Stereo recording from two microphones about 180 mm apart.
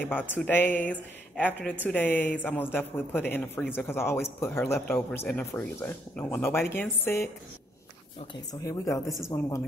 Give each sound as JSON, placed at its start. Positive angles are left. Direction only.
{"t": 0.0, "sound": "speech", "side_deg": 10}
{"t": 8.6, "sound": "speech", "side_deg": 15}